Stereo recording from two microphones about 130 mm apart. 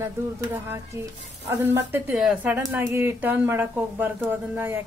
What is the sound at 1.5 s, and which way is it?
A woman's voice, 20° right (ahead or behind).